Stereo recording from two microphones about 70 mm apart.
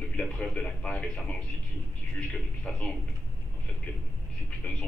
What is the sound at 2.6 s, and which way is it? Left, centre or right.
Speech, centre.